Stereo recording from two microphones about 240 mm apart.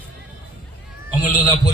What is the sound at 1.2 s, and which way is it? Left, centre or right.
Speech, centre.